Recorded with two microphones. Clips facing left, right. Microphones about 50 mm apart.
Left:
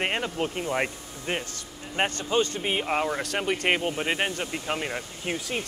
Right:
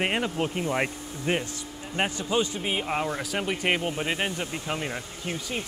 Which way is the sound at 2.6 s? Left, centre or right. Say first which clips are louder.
Left 2 dB; centre.